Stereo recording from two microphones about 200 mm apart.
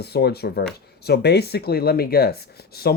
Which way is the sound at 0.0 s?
55° left (ahead or behind).